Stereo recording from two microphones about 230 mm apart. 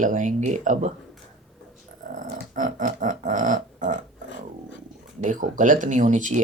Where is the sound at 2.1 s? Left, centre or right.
Right.